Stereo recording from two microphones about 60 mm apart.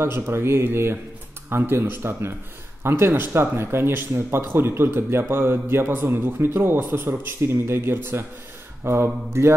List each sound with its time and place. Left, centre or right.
0.0 s speech: right